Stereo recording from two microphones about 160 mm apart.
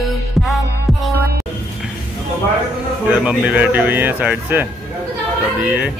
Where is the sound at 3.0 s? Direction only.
10° right (ahead or behind).